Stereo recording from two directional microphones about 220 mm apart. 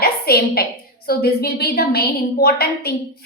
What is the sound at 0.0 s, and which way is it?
A woman's voice, 45° left (ahead or behind).